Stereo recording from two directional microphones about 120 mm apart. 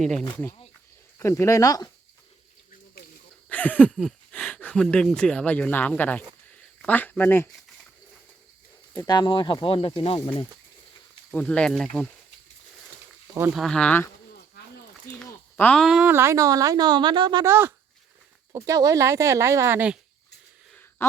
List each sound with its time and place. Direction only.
0.0 s speech: 5° left (ahead or behind)
1.2 s speech: 25° left (ahead or behind)
3.5 s a sound: 10° left (ahead or behind)
4.3 s speech: 15° left (ahead or behind)
9.0 s speech: 40° left (ahead or behind)
11.3 s speech: 10° left (ahead or behind)
13.5 s speech: 5° left (ahead or behind)
15.5 s speech: 15° left (ahead or behind)
15.8 s speech: 5° right (ahead or behind)
16.0 s speech: 20° right (ahead or behind); by 17.4 s 40° right (ahead or behind)
17.4 s speech: 20° right (ahead or behind)
21.0 s a sound: 20° left (ahead or behind)